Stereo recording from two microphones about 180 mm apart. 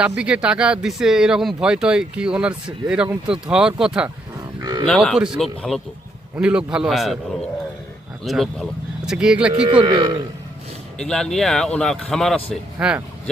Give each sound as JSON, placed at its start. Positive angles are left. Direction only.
{"t": 0.0, "sound": "speech", "side_deg": -5}
{"t": 4.6, "sound": "speech", "side_deg": -20}
{"t": 4.9, "sound": "speech", "side_deg": 0}
{"t": 8.2, "sound": "speech", "side_deg": 0}
{"t": 9.5, "sound": "speech", "side_deg": -25}
{"t": 10.9, "sound": "speech", "side_deg": 5}